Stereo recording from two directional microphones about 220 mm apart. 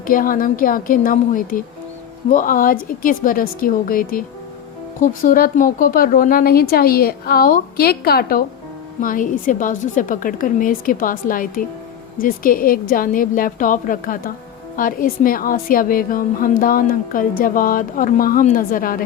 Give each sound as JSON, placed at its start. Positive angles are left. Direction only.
{"t": 0.0, "sound": "a woman's voice", "side_deg": 40}